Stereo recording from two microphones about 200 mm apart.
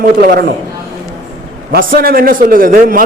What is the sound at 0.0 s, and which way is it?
Speech, 50° right (ahead or behind).